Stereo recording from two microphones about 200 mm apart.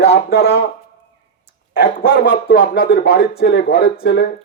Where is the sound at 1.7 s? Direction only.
55° left (ahead or behind).